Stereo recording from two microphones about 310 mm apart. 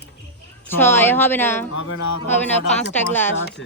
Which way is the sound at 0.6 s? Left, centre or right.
Centre.